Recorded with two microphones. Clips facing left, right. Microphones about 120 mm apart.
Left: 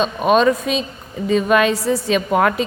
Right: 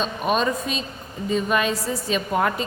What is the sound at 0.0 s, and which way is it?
A woman's voice, 90° left.